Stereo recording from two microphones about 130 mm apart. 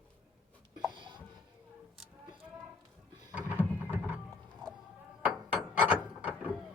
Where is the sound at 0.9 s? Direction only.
40° right (ahead or behind).